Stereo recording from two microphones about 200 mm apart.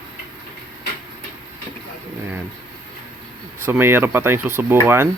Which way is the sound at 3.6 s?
10° right (ahead or behind).